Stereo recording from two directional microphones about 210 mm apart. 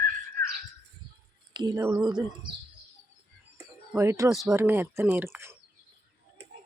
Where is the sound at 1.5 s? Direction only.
20° right (ahead or behind).